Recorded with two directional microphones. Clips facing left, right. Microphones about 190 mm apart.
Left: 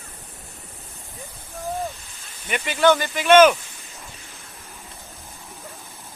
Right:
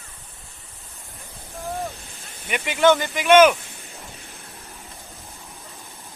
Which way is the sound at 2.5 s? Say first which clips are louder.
Right 1 dB; 15° right (ahead or behind).